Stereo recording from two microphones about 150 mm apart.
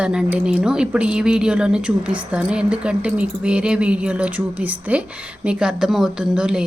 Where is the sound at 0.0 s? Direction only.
5° right (ahead or behind).